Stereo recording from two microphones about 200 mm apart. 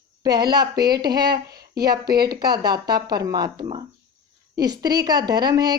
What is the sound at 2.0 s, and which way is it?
Speech, 50° right (ahead or behind).